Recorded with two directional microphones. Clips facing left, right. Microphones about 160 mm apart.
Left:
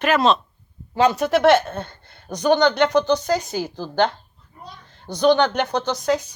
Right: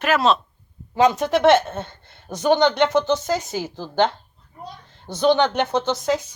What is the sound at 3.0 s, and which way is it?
Speech, 25° right (ahead or behind).